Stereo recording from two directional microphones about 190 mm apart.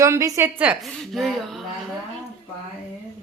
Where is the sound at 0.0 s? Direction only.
15° right (ahead or behind); by 1.6 s centre (ahead or behind).